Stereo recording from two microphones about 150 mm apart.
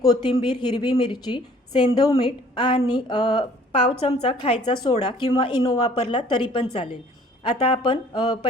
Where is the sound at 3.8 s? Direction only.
40° left (ahead or behind).